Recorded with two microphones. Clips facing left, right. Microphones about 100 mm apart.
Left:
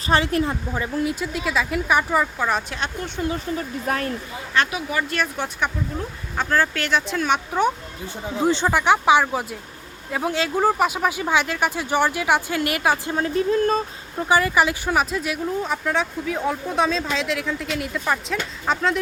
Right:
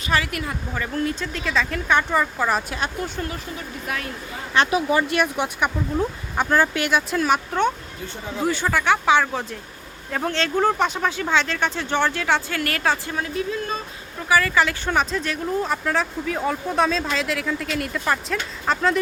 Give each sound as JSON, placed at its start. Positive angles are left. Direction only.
{"t": 0.1, "sound": "speech", "side_deg": 30}
{"t": 0.7, "sound": "speech", "side_deg": 10}
{"t": 3.8, "sound": "speech", "side_deg": 40}
{"t": 4.7, "sound": "speech", "side_deg": -25}
{"t": 5.1, "sound": "speech", "side_deg": -15}
{"t": 8.4, "sound": "speech", "side_deg": 20}
{"t": 13.1, "sound": "speech", "side_deg": 40}
{"t": 14.3, "sound": "speech", "side_deg": 20}
{"t": 14.9, "sound": "speech", "side_deg": 5}